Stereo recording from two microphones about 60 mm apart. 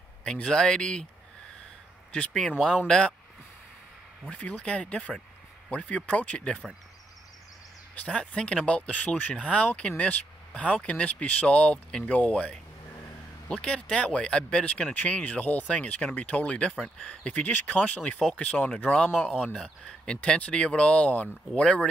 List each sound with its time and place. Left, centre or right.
0.2 s speech: centre
2.9 s speech: centre
4.3 s speech: left
7.9 s speech: left
20.2 s speech: left